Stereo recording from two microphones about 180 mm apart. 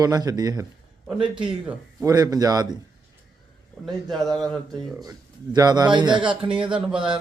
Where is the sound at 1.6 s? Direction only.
15° right (ahead or behind).